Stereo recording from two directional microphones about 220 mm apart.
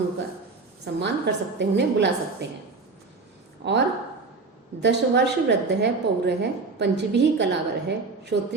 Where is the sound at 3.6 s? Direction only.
50° right (ahead or behind).